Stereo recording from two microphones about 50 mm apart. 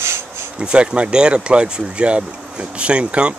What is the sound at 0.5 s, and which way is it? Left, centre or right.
Speech, right.